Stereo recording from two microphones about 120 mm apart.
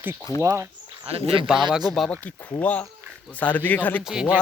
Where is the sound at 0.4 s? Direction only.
25° right (ahead or behind).